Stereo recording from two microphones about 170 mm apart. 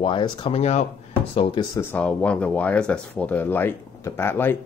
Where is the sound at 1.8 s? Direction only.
10° left (ahead or behind).